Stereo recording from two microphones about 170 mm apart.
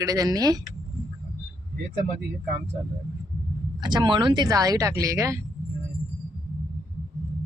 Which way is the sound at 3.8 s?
25° right (ahead or behind).